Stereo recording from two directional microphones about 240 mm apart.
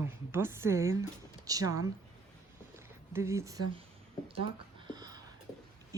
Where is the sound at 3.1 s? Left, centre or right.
Centre.